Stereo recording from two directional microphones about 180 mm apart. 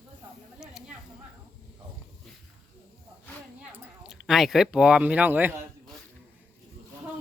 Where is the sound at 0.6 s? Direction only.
5° right (ahead or behind).